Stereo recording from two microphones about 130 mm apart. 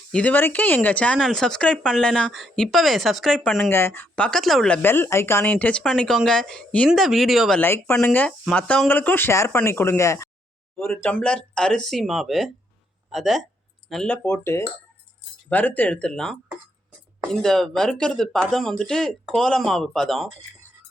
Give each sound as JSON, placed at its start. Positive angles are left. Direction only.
{"t": 0.1, "sound": "speech", "side_deg": 10}
{"t": 3.7, "sound": "speech", "side_deg": 20}
{"t": 4.8, "sound": "speech", "side_deg": 15}
{"t": 5.8, "sound": "speech", "side_deg": 0}
{"t": 7.6, "sound": "speech", "side_deg": 15}
{"t": 10.8, "sound": "speech", "side_deg": 15}
{"t": 14.3, "sound": "speech", "side_deg": 20}